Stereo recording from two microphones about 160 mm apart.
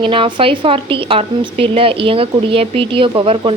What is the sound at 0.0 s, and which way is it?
A woman's voice, 30° right (ahead or behind).